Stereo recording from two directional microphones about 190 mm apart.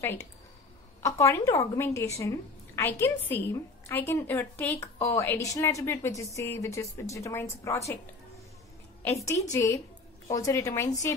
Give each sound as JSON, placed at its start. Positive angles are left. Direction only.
{"t": 0.0, "sound": "a woman's voice", "side_deg": 15}
{"t": 9.2, "sound": "a woman's voice", "side_deg": 15}